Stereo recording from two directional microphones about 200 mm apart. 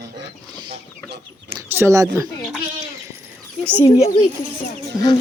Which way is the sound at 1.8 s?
15° right (ahead or behind).